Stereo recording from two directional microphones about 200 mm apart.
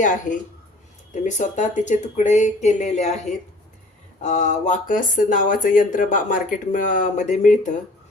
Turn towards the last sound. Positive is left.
turn(degrees=35)  # may be behind; listen again after turning